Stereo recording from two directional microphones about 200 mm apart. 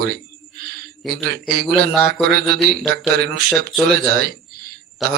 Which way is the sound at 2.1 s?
50° right (ahead or behind).